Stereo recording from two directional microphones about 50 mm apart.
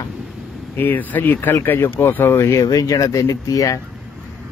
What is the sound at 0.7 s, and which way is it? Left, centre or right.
Speech, left.